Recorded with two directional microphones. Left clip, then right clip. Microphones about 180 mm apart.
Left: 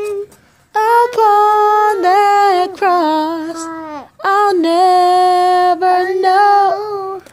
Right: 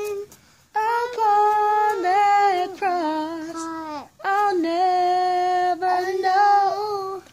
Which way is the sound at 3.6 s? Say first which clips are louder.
Left 5 dB; 10° right (ahead or behind).